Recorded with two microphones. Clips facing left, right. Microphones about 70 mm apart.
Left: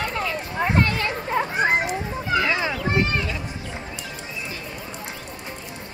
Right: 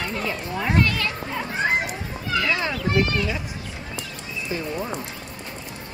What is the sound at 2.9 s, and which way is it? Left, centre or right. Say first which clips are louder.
Speech: right 2 dB; left.